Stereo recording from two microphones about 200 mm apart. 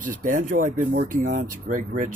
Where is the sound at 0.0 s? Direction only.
40° right (ahead or behind).